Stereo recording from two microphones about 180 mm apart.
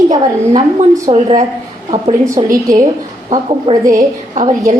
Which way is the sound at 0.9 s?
20° right (ahead or behind).